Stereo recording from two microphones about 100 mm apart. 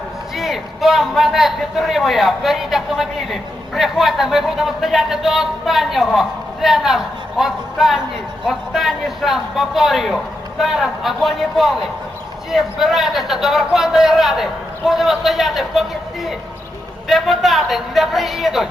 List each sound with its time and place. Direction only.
0.3 s a man's voice: centre (ahead or behind)